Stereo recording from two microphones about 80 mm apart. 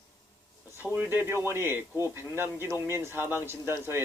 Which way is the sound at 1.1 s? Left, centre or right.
Right.